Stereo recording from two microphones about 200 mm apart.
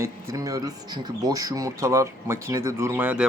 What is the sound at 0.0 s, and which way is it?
Speech, 15° right (ahead or behind).